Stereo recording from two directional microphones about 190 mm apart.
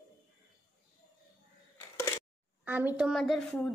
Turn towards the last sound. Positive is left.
turn(degrees=5)  # may be behind; listen again after turning